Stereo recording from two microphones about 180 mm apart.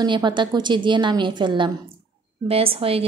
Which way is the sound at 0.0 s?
25° right (ahead or behind).